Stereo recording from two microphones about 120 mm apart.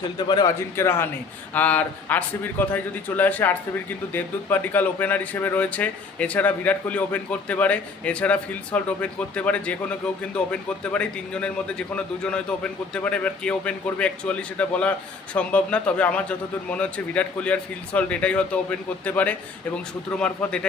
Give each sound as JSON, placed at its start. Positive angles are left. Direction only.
{"t": 0.3, "sound": "speech", "side_deg": 35}
{"t": 0.8, "sound": "speech", "side_deg": 20}
{"t": 12.9, "sound": "speech", "side_deg": 10}